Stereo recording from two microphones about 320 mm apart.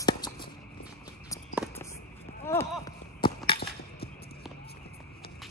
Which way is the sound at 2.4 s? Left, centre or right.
Centre.